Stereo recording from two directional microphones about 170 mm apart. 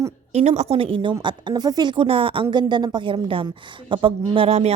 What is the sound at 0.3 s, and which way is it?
A woman's voice, 40° right (ahead or behind).